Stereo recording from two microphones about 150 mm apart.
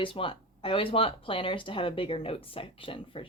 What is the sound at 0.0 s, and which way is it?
Speech, 35° left (ahead or behind).